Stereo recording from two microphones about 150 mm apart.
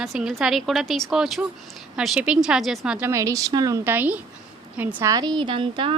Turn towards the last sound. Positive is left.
turn(degrees=-35)  # may be behind; listen again after turning